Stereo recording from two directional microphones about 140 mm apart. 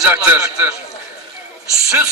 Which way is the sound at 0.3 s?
15° right (ahead or behind).